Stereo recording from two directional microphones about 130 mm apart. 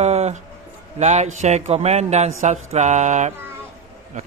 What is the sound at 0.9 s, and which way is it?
A man's voice, 60° right (ahead or behind).